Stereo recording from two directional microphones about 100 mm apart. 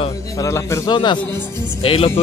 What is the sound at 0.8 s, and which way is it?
Speech, 50° left (ahead or behind).